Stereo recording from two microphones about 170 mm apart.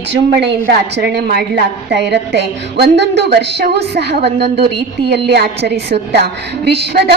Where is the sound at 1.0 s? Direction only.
70° right (ahead or behind).